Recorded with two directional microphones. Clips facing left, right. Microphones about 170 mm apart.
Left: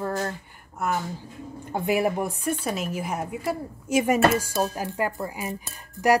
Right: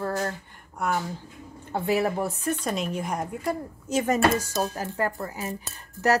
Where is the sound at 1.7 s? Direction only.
15° left (ahead or behind).